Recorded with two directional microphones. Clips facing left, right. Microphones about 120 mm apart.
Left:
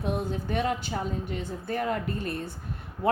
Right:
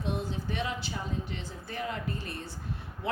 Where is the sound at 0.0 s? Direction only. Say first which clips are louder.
Left 4 dB; 55° left (ahead or behind).